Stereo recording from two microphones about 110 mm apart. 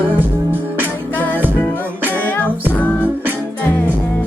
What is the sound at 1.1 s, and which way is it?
Music, 15° left (ahead or behind).